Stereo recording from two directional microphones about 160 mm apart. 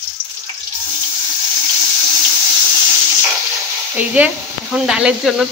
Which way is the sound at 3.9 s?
10° right (ahead or behind).